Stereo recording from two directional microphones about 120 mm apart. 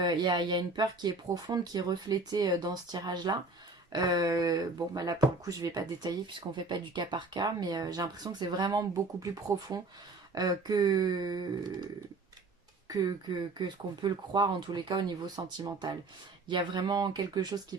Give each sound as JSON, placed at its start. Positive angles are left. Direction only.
{"t": 0.0, "sound": "speech", "side_deg": -35}
{"t": 12.9, "sound": "speech", "side_deg": -35}